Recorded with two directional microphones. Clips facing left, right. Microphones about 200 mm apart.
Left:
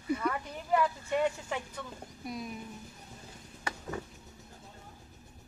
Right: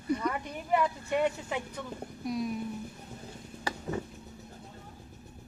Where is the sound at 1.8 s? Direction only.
15° right (ahead or behind).